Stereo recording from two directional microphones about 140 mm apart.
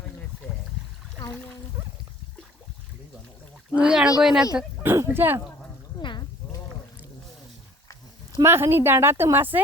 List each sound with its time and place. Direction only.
3.8 s speech: 5° right (ahead or behind)
4.5 s speech: 15° right (ahead or behind)
6.0 s sheep: 35° left (ahead or behind)
8.4 s speech: 15° right (ahead or behind)